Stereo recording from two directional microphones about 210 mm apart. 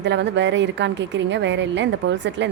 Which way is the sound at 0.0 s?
55° right (ahead or behind).